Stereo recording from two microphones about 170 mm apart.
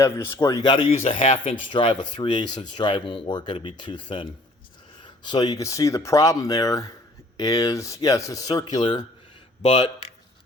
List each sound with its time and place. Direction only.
0.0 s speech: 15° left (ahead or behind); by 1.4 s 40° left (ahead or behind)
1.7 s speech: 30° left (ahead or behind)
9.6 s speech: 40° left (ahead or behind)